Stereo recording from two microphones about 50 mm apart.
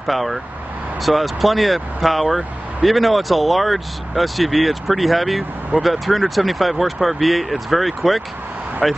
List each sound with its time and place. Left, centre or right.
0.0 s speech: centre